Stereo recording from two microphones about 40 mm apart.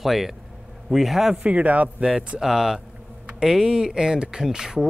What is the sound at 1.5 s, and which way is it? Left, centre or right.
Speech, right.